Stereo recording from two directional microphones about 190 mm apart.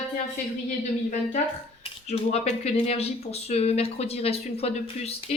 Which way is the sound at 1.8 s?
35° left (ahead or behind).